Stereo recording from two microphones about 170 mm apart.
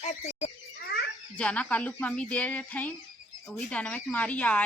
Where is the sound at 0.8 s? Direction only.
70° left (ahead or behind).